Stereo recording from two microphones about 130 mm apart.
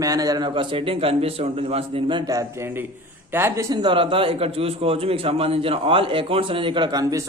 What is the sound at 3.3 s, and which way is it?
Speech, 20° right (ahead or behind).